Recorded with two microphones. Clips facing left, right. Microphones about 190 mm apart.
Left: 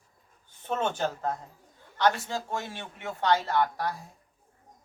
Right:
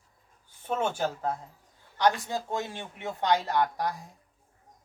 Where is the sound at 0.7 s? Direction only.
10° right (ahead or behind).